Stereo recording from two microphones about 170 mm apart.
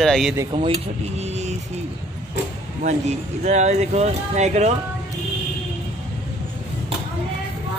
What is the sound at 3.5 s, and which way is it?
Speech, 40° right (ahead or behind).